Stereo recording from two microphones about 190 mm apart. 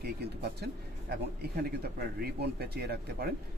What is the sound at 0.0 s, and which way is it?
Speech, 60° right (ahead or behind).